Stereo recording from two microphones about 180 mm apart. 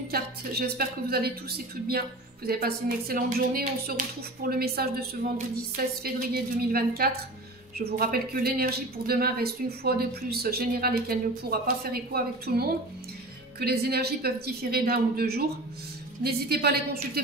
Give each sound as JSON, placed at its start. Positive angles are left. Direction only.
{"t": 0.1, "sound": "speech", "side_deg": -60}
{"t": 6.0, "sound": "speech", "side_deg": -55}